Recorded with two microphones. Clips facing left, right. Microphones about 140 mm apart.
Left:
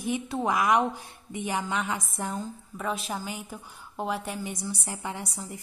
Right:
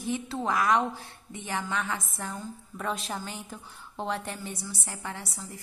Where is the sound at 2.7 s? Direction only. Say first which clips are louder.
Left 1 dB; 5° left (ahead or behind).